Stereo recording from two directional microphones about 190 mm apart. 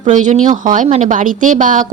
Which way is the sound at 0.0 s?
40° right (ahead or behind).